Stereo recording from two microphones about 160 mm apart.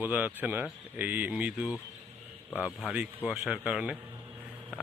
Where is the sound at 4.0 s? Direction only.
20° right (ahead or behind).